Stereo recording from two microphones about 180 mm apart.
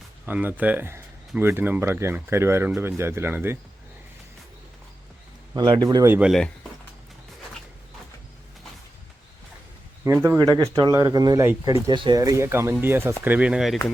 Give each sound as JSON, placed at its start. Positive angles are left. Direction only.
{"t": 0.3, "sound": "speech", "side_deg": -10}
{"t": 5.5, "sound": "speech", "side_deg": -25}
{"t": 10.2, "sound": "speech", "side_deg": -20}